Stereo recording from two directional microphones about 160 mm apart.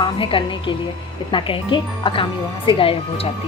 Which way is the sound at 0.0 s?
30° left (ahead or behind).